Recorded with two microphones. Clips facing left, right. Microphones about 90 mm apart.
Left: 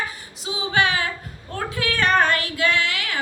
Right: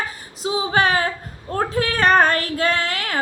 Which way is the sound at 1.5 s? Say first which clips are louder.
Right 4 dB; 35° right (ahead or behind).